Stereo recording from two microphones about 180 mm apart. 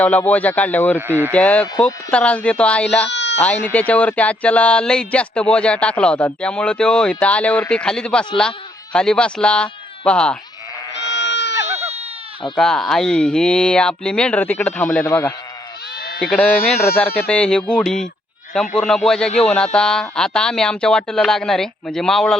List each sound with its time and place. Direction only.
0.0 s speech: 10° left (ahead or behind)
0.9 s speech: 10° right (ahead or behind)
1.3 s speech: 5° left (ahead or behind)
3.1 s baby cry: 80° left
3.4 s speech: 10° left (ahead or behind)
10.9 s goat: 80° left
11.8 s goat: 35° right (ahead or behind)
12.5 s speech: 5° left (ahead or behind)
16.0 s bleat: 55° left (ahead or behind)
16.2 s speech: 5° left (ahead or behind)